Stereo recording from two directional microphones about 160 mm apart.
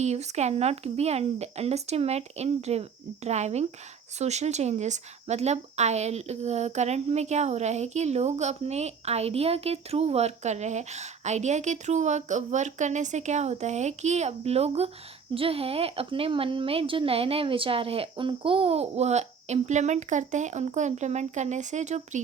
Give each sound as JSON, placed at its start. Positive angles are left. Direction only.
{"t": 0.0, "sound": "speech", "side_deg": -45}